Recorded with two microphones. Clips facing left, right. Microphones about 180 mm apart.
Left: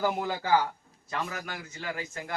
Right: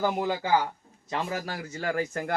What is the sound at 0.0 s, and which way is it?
A man's voice, 20° right (ahead or behind).